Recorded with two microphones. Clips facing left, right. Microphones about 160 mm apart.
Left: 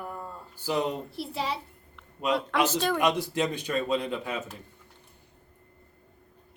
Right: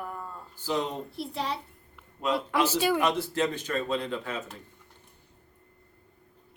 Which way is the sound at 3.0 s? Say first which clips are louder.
Left 1 dB; 15° left (ahead or behind).